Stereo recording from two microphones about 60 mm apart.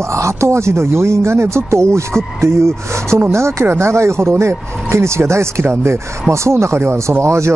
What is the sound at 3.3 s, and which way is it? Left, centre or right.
Speech, right.